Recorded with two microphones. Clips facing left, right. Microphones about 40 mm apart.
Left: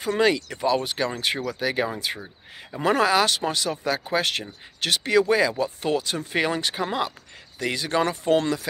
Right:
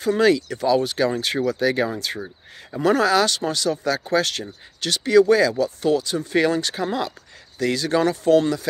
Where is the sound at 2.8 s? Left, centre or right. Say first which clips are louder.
Right 2 dB; left.